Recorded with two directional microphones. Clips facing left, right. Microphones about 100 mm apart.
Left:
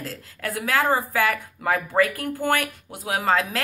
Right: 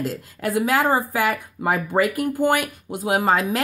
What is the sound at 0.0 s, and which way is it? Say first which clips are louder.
Speech: right 6 dB; 15° right (ahead or behind).